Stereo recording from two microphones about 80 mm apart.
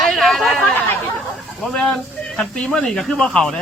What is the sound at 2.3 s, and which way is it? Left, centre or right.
Speech, centre.